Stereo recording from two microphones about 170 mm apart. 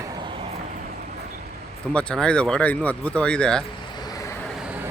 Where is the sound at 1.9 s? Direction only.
5° left (ahead or behind).